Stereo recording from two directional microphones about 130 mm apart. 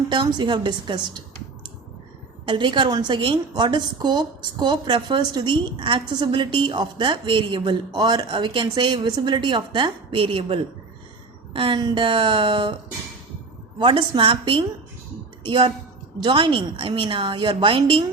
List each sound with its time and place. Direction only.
0.1 s a woman's voice: 35° right (ahead or behind)
2.5 s a woman's voice: 40° right (ahead or behind)
13.7 s a woman's voice: 40° right (ahead or behind)